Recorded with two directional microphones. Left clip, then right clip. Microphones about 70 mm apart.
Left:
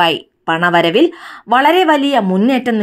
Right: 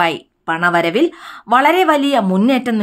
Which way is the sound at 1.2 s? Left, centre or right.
Centre.